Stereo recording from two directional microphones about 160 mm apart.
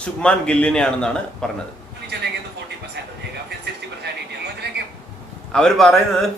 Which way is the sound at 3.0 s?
90° right.